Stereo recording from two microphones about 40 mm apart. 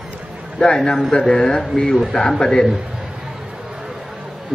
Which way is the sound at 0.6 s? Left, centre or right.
Left.